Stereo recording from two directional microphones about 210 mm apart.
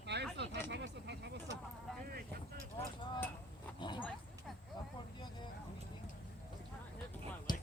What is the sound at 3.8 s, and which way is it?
Dog, 20° left (ahead or behind).